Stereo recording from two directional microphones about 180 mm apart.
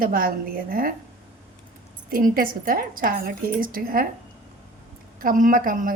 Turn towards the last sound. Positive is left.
turn(degrees=-50)  # may be behind; listen again after turning